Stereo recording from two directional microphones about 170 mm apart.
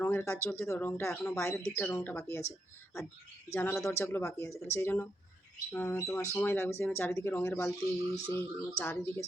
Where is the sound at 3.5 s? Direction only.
15° left (ahead or behind).